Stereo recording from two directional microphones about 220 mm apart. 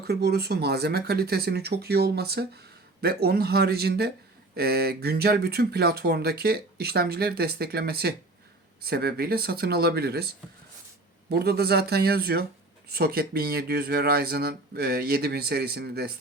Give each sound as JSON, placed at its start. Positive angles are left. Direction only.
{"t": 0.1, "sound": "speech", "side_deg": -45}